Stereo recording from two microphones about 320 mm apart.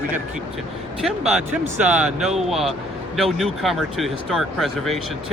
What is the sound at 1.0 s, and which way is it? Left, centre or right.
Speech, centre.